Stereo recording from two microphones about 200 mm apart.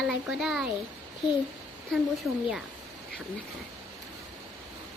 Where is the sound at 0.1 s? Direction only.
Centre (ahead or behind).